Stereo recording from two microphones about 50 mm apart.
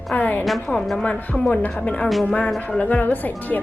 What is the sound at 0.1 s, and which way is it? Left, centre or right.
Speech, left.